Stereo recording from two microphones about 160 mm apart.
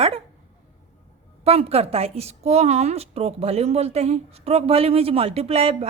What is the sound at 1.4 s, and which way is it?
A woman's voice, 40° right (ahead or behind).